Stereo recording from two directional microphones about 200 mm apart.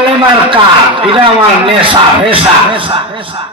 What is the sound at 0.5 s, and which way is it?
Speech, 25° right (ahead or behind).